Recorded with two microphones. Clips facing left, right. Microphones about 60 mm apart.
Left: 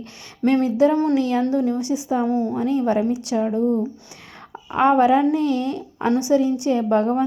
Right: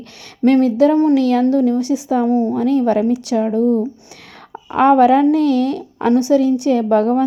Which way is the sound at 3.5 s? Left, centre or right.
Right.